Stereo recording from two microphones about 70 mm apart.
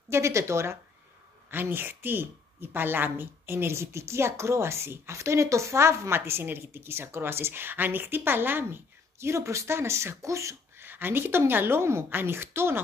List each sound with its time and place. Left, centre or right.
0.1 s a woman's voice: right
1.5 s a woman's voice: right
9.2 s speech: right
10.8 s a woman's voice: right